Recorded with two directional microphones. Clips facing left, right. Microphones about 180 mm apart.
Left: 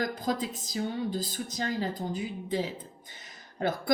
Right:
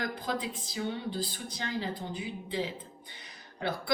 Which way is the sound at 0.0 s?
40° left (ahead or behind).